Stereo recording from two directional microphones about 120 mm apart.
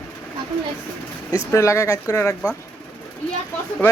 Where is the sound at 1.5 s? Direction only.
25° left (ahead or behind).